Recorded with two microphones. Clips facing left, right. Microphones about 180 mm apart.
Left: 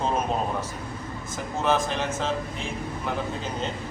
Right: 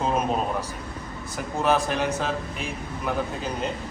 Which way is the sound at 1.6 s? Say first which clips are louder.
Right 2 dB; 15° right (ahead or behind).